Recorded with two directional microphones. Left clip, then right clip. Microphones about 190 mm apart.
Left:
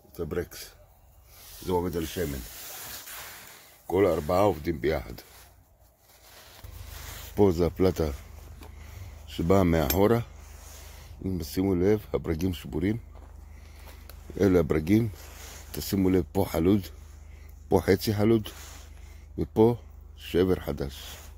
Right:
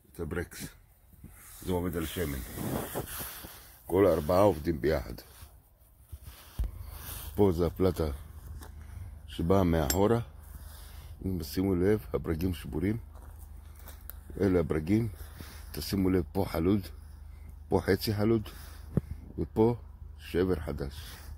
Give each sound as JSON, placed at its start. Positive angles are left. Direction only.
{"t": 0.2, "sound": "speech", "side_deg": -10}
{"t": 3.8, "sound": "speech", "side_deg": -5}
{"t": 7.3, "sound": "speech", "side_deg": 15}
{"t": 9.3, "sound": "speech", "side_deg": 15}
{"t": 14.4, "sound": "speech", "side_deg": 25}